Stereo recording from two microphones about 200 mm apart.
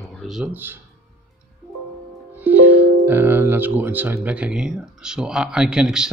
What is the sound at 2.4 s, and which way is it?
Speech, 10° right (ahead or behind).